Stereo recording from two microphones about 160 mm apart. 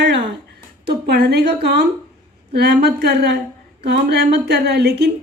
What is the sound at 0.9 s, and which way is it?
A woman's voice, 75° right (ahead or behind).